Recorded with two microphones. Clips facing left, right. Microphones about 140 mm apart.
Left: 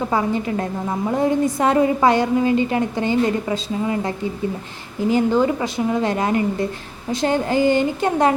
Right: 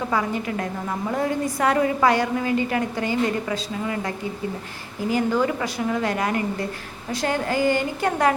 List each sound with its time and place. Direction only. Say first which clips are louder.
0.1 s a woman's voice: left 4 dB; 25° left (ahead or behind)